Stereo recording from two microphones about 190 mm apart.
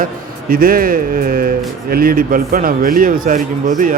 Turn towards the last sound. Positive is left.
turn(degrees=-45)  # may be behind; listen again after turning